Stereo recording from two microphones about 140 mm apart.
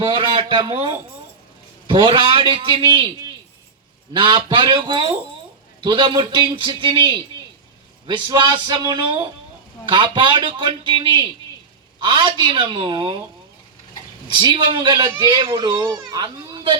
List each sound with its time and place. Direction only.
0.0 s a sound: 40° right (ahead or behind)
0.7 s a man's voice: 40° right (ahead or behind)
4.1 s a man's voice: 35° right (ahead or behind)
14.3 s a man's voice: 35° right (ahead or behind)